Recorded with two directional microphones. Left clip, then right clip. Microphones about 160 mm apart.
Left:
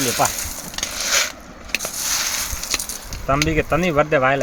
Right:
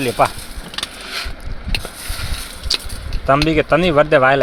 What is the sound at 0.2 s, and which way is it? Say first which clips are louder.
Sizzle: right 6 dB; 20° right (ahead or behind).